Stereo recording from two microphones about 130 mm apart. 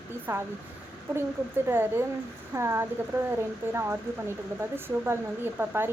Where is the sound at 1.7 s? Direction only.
15° right (ahead or behind).